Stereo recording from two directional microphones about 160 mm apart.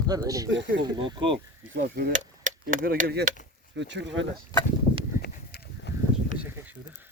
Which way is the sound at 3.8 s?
90° right.